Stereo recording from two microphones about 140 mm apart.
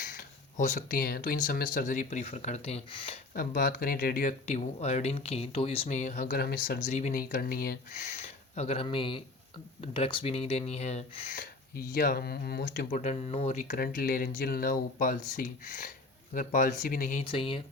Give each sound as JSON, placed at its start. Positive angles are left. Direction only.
{"t": 0.0, "sound": "speech", "side_deg": 70}
{"t": 3.3, "sound": "speech", "side_deg": 90}
{"t": 4.4, "sound": "speech", "side_deg": 50}
{"t": 5.9, "sound": "speech", "side_deg": 60}
{"t": 8.0, "sound": "speech", "side_deg": 50}
{"t": 11.3, "sound": "speech", "side_deg": 90}
{"t": 13.0, "sound": "speech", "side_deg": 50}
{"t": 13.6, "sound": "speech", "side_deg": 85}
{"t": 17.2, "sound": "speech", "side_deg": 40}